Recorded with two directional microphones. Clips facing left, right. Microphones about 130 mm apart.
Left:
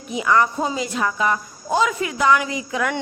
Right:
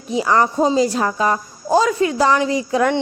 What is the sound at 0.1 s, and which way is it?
A woman's voice, 35° right (ahead or behind).